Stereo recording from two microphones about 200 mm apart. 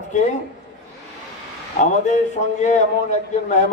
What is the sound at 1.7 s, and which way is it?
A man's voice, 40° left (ahead or behind).